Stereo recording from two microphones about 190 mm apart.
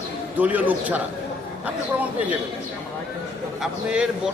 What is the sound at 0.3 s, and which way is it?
Speech, 10° right (ahead or behind).